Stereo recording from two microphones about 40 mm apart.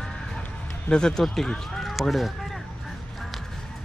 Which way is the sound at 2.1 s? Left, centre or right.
Centre.